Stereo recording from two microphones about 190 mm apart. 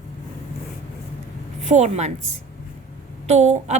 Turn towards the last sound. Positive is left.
turn(degrees=-35)  # may be behind; listen again after turning